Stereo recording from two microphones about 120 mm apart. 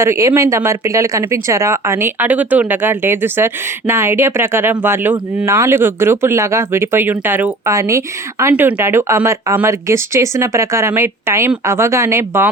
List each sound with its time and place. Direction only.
0.0 s speech: 20° right (ahead or behind)